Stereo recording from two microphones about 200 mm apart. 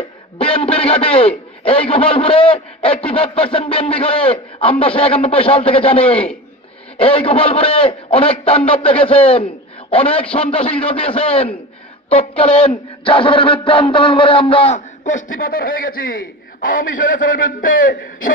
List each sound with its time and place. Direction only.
0.4 s a man's voice: 30° left (ahead or behind)
15.3 s a man's voice: 45° left (ahead or behind)